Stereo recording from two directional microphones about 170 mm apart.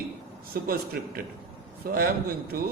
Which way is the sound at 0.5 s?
65° right (ahead or behind).